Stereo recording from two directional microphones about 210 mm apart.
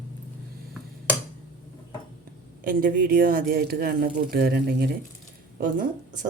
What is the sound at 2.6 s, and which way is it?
Speech, 45° right (ahead or behind).